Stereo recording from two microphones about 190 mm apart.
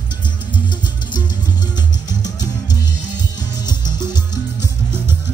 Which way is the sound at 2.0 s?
20° left (ahead or behind).